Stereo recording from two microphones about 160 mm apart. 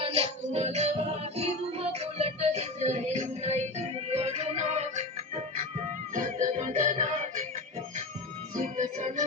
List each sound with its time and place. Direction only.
0.0 s music: 40° right (ahead or behind)
8.5 s music: 45° right (ahead or behind)